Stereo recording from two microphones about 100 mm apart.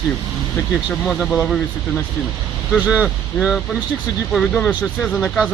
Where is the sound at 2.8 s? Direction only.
10° right (ahead or behind).